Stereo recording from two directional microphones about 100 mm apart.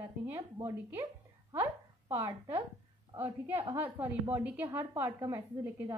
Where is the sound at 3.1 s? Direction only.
20° right (ahead or behind).